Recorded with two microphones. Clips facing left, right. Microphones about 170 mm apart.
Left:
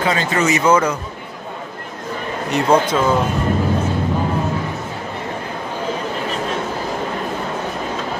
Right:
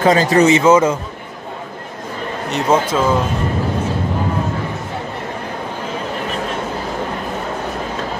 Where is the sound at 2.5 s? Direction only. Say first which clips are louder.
Left 1 dB; 5° right (ahead or behind).